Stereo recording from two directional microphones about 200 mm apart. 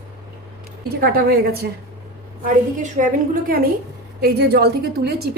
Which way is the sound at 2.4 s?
40° right (ahead or behind).